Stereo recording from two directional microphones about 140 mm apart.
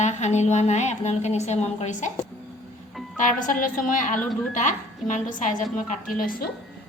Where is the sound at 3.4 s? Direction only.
70° left (ahead or behind).